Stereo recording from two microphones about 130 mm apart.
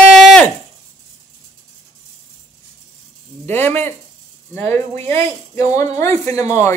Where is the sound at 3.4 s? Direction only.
15° left (ahead or behind).